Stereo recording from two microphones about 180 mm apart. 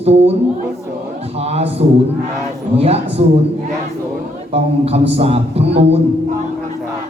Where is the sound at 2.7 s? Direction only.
35° right (ahead or behind).